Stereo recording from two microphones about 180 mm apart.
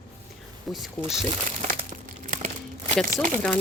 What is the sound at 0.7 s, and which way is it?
Speech, centre (ahead or behind).